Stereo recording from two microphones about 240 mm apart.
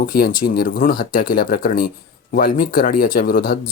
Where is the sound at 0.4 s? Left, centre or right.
Left.